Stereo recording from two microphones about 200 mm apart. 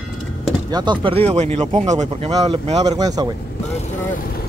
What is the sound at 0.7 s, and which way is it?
Speech, 20° right (ahead or behind).